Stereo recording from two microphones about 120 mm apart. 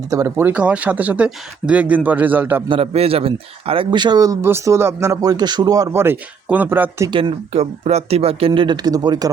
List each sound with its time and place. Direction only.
0.1 s speech: 25° right (ahead or behind)
2.6 s speech: 50° right (ahead or behind); by 6.9 s 15° right (ahead or behind)
7.1 s speech: 45° right (ahead or behind)
7.5 s speech: 65° right (ahead or behind); by 9.3 s 35° right (ahead or behind)